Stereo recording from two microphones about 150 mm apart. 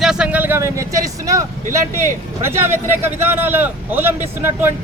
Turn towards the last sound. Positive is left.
turn(degrees=-15)  # may be behind; listen again after turning